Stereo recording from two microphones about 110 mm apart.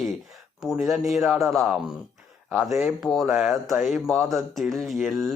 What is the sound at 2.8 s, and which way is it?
Speech, centre (ahead or behind).